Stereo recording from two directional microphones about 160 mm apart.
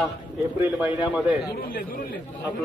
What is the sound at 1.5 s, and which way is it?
Speech, 65° left (ahead or behind).